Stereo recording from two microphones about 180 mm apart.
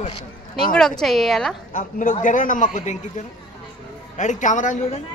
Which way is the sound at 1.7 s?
45° left (ahead or behind).